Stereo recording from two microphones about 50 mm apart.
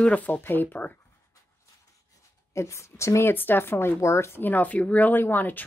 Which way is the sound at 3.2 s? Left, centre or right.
Left.